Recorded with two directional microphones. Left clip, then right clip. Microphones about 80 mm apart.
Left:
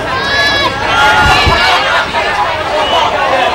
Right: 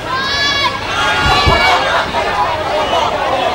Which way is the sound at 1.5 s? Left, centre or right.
Left.